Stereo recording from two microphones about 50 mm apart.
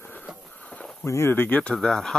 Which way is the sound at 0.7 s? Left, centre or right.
Centre.